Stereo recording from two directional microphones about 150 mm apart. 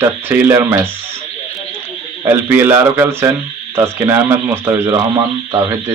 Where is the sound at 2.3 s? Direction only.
15° right (ahead or behind).